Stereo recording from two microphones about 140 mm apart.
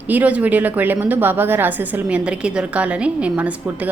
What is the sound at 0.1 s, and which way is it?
A woman's voice, 10° right (ahead or behind).